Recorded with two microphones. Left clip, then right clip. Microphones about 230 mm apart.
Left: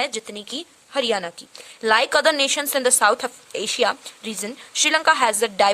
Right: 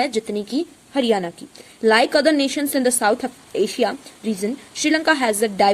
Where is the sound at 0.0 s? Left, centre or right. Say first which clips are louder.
Right 5 dB; left.